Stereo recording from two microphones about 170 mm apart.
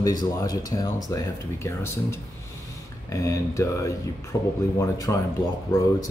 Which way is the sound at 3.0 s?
20° left (ahead or behind).